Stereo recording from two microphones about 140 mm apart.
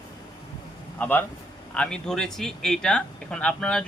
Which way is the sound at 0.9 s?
15° left (ahead or behind).